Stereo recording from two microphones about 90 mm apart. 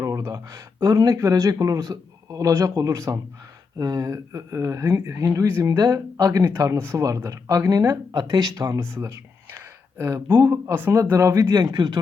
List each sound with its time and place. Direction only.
0.0 s speech: 35° right (ahead or behind)
8.8 s a sound: 30° right (ahead or behind)
10.8 s speech: 30° right (ahead or behind)
11.4 s speech: 45° right (ahead or behind)